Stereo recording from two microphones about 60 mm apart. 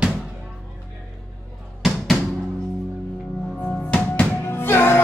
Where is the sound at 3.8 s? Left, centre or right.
Left.